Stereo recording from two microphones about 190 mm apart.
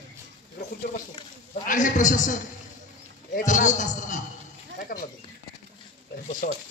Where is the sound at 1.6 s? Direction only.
45° left (ahead or behind).